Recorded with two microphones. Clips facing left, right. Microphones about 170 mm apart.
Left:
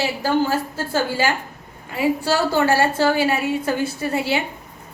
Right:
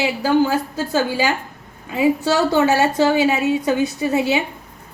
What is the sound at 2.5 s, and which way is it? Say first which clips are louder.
A woman's voice: right 2 dB; 20° right (ahead or behind).